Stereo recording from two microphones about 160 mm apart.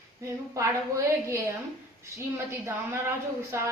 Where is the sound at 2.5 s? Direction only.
15° right (ahead or behind).